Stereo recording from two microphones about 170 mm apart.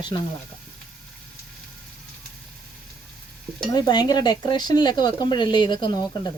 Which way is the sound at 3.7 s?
25° left (ahead or behind).